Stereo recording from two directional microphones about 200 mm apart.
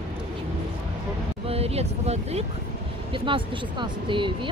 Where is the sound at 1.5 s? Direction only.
30° right (ahead or behind).